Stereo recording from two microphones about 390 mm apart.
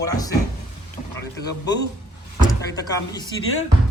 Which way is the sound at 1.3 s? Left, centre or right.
Left.